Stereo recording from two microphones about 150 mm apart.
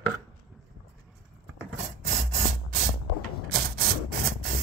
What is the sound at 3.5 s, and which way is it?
Rub, 85° right.